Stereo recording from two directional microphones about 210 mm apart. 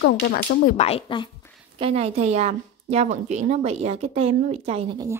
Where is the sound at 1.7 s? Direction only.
25° right (ahead or behind).